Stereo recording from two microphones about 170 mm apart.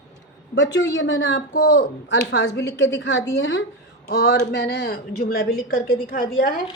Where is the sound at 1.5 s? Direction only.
75° left (ahead or behind); by 6.2 s 60° left (ahead or behind).